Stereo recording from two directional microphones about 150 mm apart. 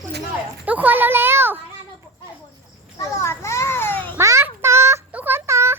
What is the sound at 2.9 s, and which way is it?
Children playing, 20° left (ahead or behind).